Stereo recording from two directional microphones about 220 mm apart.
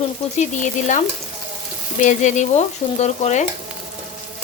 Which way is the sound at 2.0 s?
35° left (ahead or behind).